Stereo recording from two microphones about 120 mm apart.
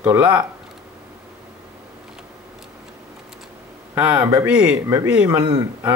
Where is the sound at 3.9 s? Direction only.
10° right (ahead or behind).